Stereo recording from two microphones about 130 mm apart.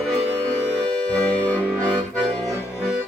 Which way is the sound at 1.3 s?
10° left (ahead or behind).